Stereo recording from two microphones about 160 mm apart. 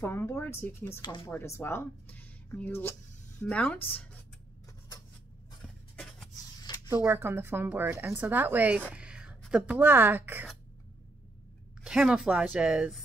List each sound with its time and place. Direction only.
0.0 s speech: 15° left (ahead or behind)
1.0 s speech: 25° left (ahead or behind)
1.3 s speech: 15° left (ahead or behind)
5.6 s a sound: centre (ahead or behind)
6.9 s speech: 15° right (ahead or behind)
8.9 s a sound: 5° right (ahead or behind)
9.5 s speech: 10° right (ahead or behind)
11.8 s speech: 5° right (ahead or behind)